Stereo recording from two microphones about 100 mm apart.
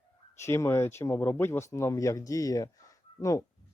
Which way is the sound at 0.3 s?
25° left (ahead or behind).